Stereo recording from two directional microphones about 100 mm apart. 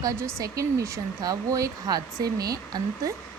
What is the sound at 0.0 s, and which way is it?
Speech, 30° right (ahead or behind).